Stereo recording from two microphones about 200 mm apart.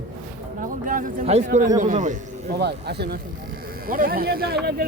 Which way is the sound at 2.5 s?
55° right (ahead or behind).